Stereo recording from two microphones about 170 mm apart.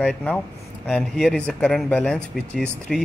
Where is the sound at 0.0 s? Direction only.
5° left (ahead or behind).